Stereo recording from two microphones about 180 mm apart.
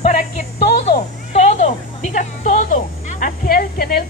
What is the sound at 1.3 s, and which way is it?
A child's voice, 40° left (ahead or behind).